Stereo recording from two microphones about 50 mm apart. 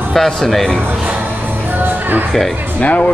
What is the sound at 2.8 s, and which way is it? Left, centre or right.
Speech, left.